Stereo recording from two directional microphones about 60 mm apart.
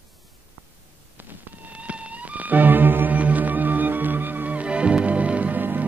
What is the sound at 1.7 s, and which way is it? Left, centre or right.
Music, right.